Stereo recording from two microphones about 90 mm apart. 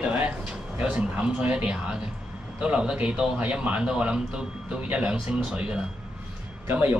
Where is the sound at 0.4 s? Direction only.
10° right (ahead or behind).